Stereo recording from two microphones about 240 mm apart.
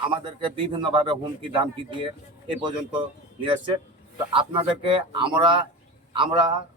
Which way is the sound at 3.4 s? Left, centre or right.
Right.